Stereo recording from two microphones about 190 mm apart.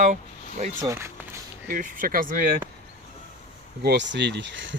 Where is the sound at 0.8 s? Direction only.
15° right (ahead or behind).